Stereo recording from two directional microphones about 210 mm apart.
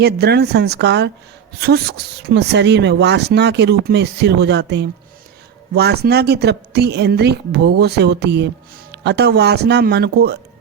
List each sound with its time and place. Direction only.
0.0 s a woman's voice: 50° right (ahead or behind)